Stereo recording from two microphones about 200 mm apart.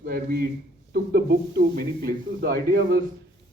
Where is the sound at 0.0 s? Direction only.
45° right (ahead or behind).